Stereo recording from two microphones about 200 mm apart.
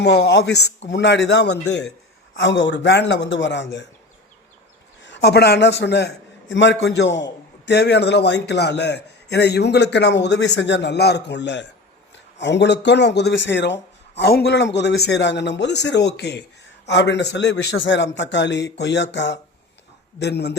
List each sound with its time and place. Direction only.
0.0 s a man's voice: 55° left (ahead or behind); by 1.9 s 75° left (ahead or behind)
2.3 s a man's voice: 65° left (ahead or behind)
5.0 s a man's voice: 60° left (ahead or behind)